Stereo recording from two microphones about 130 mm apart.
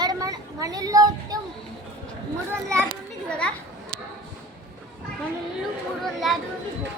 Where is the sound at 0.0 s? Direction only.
30° right (ahead or behind).